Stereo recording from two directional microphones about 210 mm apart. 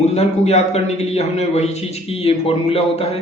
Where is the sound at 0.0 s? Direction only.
30° left (ahead or behind).